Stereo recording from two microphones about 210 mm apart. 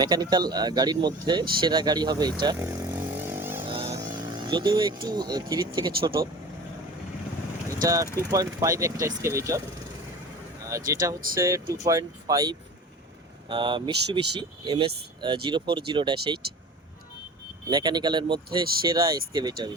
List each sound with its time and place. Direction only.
0.0 s speech: 20° right (ahead or behind)
2.4 s vehicle: 15° right (ahead or behind)
3.6 s vehicle: 25° right (ahead or behind)
5.0 s speech: 20° right (ahead or behind)
7.7 s vehicle: 15° right (ahead or behind)
8.3 s speech: 15° right (ahead or behind)
10.7 s speech: 15° right (ahead or behind)
17.7 s speech: 20° right (ahead or behind)